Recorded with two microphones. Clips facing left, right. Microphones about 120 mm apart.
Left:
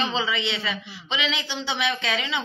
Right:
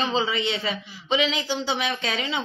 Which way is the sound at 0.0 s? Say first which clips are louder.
Right 2 dB; 40° right (ahead or behind).